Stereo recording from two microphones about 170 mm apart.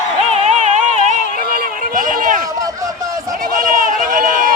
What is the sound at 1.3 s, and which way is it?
Run, 55° right (ahead or behind).